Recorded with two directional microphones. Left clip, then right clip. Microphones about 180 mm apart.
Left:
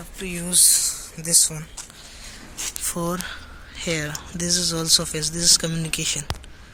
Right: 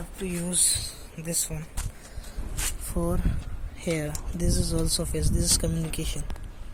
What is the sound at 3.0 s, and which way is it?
Speech, 20° left (ahead or behind).